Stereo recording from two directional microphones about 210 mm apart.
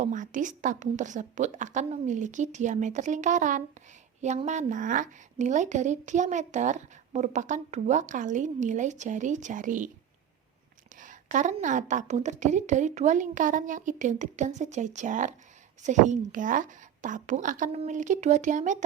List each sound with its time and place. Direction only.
0.0 s a woman's voice: 35° right (ahead or behind)
11.0 s a woman's voice: 35° right (ahead or behind)